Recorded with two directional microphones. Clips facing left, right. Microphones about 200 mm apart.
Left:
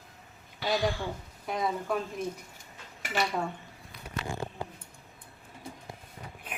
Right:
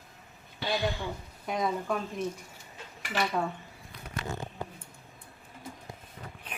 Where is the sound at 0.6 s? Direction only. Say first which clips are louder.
Left 2 dB; 25° right (ahead or behind).